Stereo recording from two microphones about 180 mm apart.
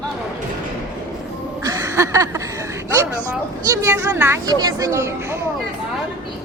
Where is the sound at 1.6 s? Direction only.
15° right (ahead or behind).